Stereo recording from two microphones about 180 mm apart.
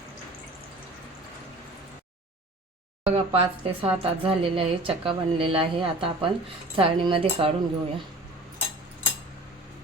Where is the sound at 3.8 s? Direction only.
30° right (ahead or behind).